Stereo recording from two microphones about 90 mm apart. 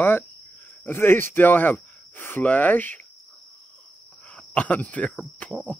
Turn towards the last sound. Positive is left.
turn(degrees=15)  # may be behind; listen again after turning